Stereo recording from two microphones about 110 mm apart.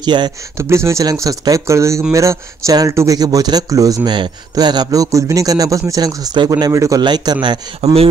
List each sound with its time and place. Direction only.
0.0 s speech: 45° right (ahead or behind)
0.6 s speech: 25° right (ahead or behind)
6.5 s speech: 30° right (ahead or behind)
7.0 s speech: 40° right (ahead or behind)
7.8 s speech: 65° right (ahead or behind)